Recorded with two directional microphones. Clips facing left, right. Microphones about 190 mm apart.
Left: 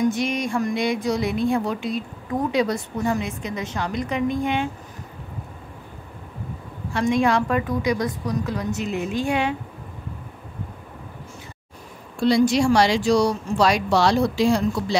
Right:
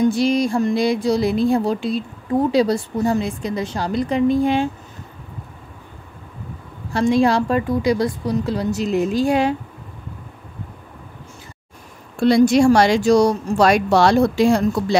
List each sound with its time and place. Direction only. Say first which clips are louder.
0.0 s a woman's voice: right 6 dB; 35° right (ahead or behind)
6.9 s a woman's voice: right 4 dB; 35° right (ahead or behind)
12.2 s speech: right 5 dB; 50° right (ahead or behind)